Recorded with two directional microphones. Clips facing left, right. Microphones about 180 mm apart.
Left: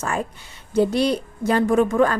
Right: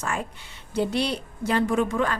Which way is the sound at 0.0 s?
40° left (ahead or behind).